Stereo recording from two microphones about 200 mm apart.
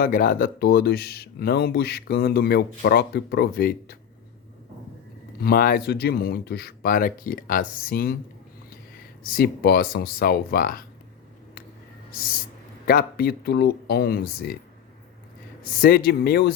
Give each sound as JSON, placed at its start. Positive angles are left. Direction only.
{"t": 0.0, "sound": "speech", "side_deg": 45}
{"t": 5.4, "sound": "speech", "side_deg": 45}
{"t": 9.2, "sound": "speech", "side_deg": 45}
{"t": 12.1, "sound": "speech", "side_deg": 45}
{"t": 15.6, "sound": "speech", "side_deg": 50}